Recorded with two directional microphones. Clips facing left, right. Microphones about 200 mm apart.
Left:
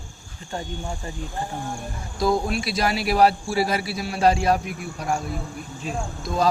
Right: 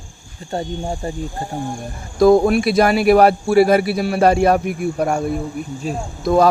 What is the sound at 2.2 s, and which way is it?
Speech, 55° right (ahead or behind).